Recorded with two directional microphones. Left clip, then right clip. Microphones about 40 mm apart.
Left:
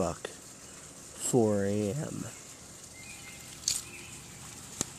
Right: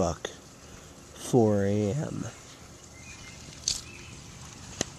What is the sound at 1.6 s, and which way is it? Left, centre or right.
Speech, centre.